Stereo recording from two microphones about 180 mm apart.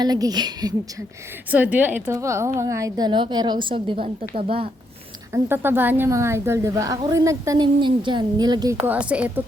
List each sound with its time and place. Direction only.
0.0 s a woman's voice: 20° right (ahead or behind)
1.5 s a woman's voice: 10° right (ahead or behind); by 4.7 s 30° right (ahead or behind)
5.3 s a woman's voice: 10° right (ahead or behind)
8.8 s a woman's voice: 10° right (ahead or behind)